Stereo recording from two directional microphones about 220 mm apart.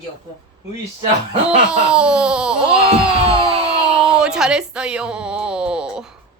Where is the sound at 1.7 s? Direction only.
5° right (ahead or behind).